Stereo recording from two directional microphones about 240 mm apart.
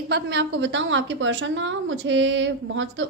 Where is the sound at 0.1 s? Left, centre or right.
Right.